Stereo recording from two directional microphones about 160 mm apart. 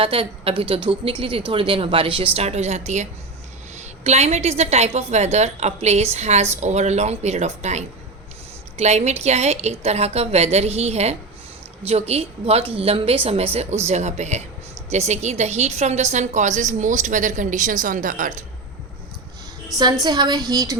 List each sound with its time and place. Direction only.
0.0 s a woman's voice: 35° right (ahead or behind); by 18.4 s 55° right (ahead or behind)
19.7 s a woman's voice: centre (ahead or behind)
20.1 s a woman's voice: 25° right (ahead or behind)